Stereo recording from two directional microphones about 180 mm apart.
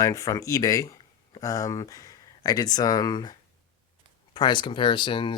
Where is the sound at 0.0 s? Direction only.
15° left (ahead or behind).